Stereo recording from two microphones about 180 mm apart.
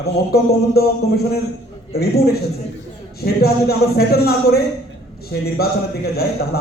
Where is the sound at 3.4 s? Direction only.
60° left (ahead or behind).